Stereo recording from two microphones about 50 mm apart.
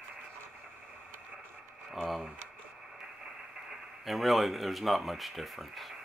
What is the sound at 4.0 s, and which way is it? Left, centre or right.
Speech, centre.